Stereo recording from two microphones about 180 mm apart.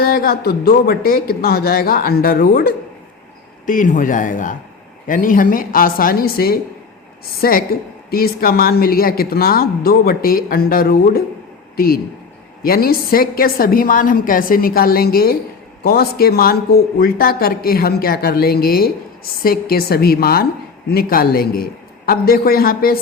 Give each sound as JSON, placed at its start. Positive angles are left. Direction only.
{"t": 0.0, "sound": "speech", "side_deg": 55}
{"t": 3.7, "sound": "a woman's voice", "side_deg": 45}
{"t": 12.6, "sound": "speech", "side_deg": 55}